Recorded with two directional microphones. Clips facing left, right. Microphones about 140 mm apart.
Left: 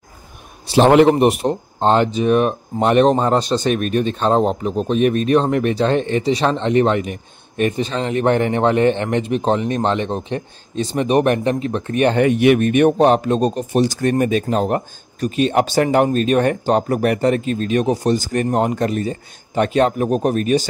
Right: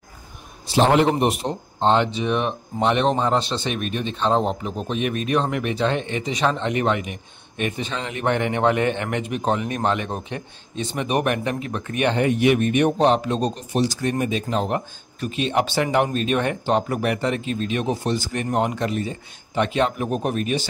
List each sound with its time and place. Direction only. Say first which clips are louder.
0.7 s a man's voice: left 6 dB; 65° left (ahead or behind); by 12.2 s 35° left (ahead or behind)
12.2 s a man's voice: left 4 dB; 65° left (ahead or behind); by 20.6 s 40° left (ahead or behind)